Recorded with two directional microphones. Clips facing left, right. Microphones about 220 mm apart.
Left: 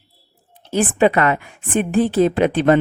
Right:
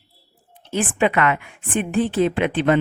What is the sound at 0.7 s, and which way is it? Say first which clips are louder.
Speech: left 4 dB; 40° left (ahead or behind).